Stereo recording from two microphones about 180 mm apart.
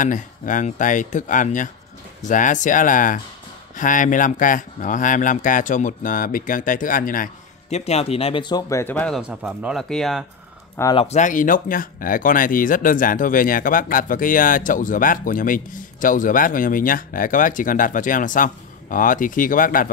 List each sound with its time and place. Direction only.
0.0 s speech: 45° left (ahead or behind)
7.7 s speech: 35° left (ahead or behind); by 9.2 s 5° left (ahead or behind)
9.3 s speech: 5° right (ahead or behind)
11.0 s speech: 40° left (ahead or behind)